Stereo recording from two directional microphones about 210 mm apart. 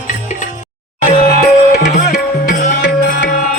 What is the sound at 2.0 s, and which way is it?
Music, 45° left (ahead or behind).